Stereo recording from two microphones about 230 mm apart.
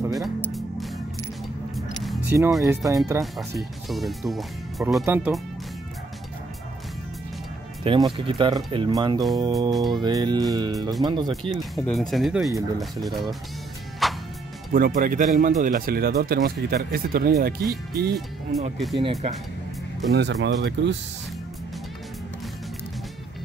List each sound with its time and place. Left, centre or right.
0.1 s music: centre
2.0 s music: centre
2.6 s speech: centre
3.3 s speech: centre
7.8 s speech: right
9.7 s speech: centre
10.0 s speech: centre
11.7 s speech: centre
14.0 s music: centre
14.7 s speech: right
18.5 s speech: centre
18.9 s speech: right
20.1 s speech: right